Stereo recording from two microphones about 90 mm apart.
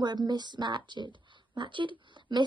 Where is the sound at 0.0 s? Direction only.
55° right (ahead or behind).